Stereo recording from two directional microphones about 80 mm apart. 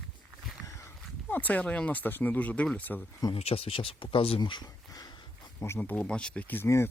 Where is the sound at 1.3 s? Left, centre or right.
Centre.